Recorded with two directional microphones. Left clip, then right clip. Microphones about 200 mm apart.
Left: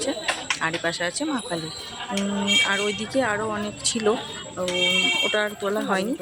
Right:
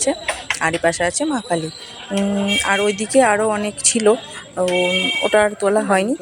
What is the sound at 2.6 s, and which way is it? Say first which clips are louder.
Speech: right 6 dB; 25° right (ahead or behind).